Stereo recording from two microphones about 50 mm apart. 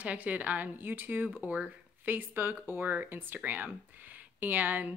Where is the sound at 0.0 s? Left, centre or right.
Right.